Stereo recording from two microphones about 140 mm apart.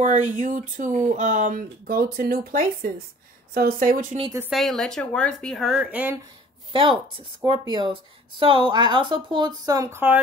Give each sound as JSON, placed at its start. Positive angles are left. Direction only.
{"t": 0.0, "sound": "speech", "side_deg": -60}
{"t": 4.5, "sound": "a woman's voice", "side_deg": 0}
{"t": 6.7, "sound": "speech", "side_deg": -40}
{"t": 9.7, "sound": "speech", "side_deg": -20}